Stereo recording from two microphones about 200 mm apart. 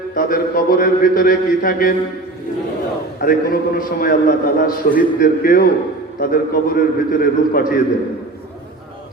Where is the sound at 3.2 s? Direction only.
45° left (ahead or behind).